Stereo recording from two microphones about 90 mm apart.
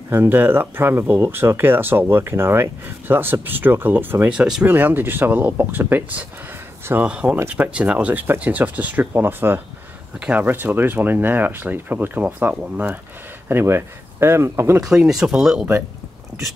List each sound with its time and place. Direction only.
0.1 s speech: 25° right (ahead or behind)
4.4 s speech: 10° right (ahead or behind)
4.6 s speech: 20° right (ahead or behind)
14.8 s speech: 5° right (ahead or behind)